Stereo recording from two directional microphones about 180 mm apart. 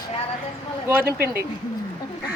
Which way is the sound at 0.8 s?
10° right (ahead or behind).